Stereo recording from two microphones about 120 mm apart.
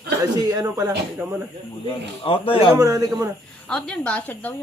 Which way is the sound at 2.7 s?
30° right (ahead or behind).